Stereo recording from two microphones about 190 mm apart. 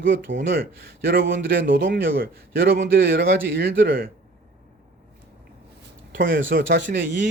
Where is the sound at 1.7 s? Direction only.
55° right (ahead or behind).